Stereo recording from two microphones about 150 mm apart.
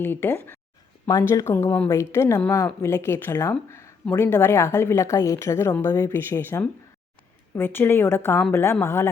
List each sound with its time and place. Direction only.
0.0 s a woman's voice: 15° left (ahead or behind)
3.7 s a sound: 20° left (ahead or behind)
4.0 s a woman's voice: 15° left (ahead or behind)